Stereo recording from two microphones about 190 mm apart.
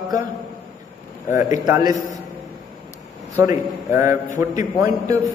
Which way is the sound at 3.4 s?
15° right (ahead or behind).